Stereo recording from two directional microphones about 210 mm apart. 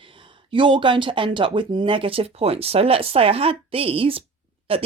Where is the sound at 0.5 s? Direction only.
25° right (ahead or behind).